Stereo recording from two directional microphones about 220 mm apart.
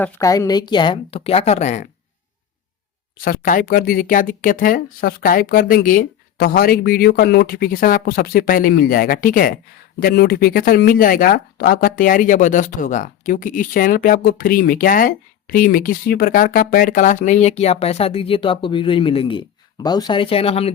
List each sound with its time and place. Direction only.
0.0 s a woman's voice: 15° left (ahead or behind); by 1.9 s 30° left (ahead or behind)
3.2 s speech: 40° left (ahead or behind)